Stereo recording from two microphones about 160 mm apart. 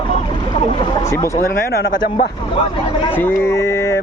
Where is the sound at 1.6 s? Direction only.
75° left (ahead or behind).